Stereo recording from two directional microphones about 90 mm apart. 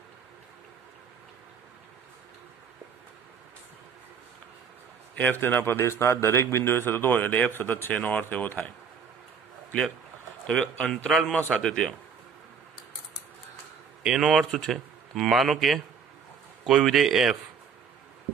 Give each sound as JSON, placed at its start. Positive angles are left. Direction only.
{"t": 5.1, "sound": "a man's voice", "side_deg": 20}
{"t": 10.4, "sound": "speech", "side_deg": 10}
{"t": 14.0, "sound": "speech", "side_deg": -5}